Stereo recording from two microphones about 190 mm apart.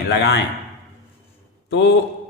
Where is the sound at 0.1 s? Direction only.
60° left (ahead or behind).